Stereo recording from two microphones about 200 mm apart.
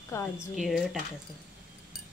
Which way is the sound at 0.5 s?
Centre (ahead or behind).